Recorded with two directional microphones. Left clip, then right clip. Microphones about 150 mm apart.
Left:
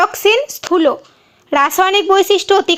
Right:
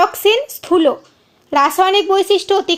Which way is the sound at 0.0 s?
5° left (ahead or behind).